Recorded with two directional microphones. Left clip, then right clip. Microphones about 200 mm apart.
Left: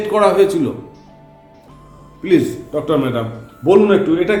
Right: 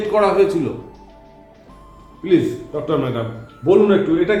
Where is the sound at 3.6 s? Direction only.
30° left (ahead or behind).